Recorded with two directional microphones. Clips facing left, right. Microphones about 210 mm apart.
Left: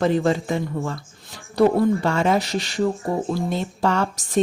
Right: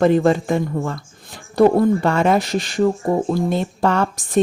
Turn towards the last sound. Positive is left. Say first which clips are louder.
# right 3 dB
turn(degrees=-55)  # may be behind; listen again after turning